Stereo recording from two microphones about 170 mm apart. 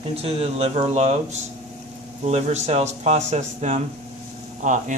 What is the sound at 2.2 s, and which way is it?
A man's voice, 40° right (ahead or behind).